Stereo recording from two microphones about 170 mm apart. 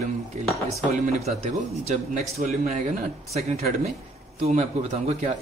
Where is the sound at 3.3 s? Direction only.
40° right (ahead or behind).